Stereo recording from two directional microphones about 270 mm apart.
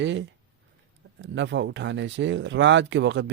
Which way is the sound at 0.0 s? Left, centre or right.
Right.